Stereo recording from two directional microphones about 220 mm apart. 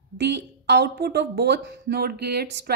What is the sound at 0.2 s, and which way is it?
Speech, 50° right (ahead or behind).